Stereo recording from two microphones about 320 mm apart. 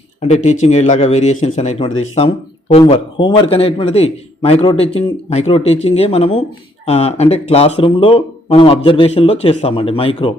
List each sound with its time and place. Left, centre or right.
0.2 s speech: left